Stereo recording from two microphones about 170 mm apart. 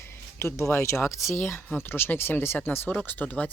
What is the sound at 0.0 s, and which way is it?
Speech, 15° left (ahead or behind).